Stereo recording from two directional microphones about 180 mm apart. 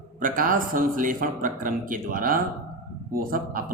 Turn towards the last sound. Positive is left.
turn(degrees=-50)  # may be behind; listen again after turning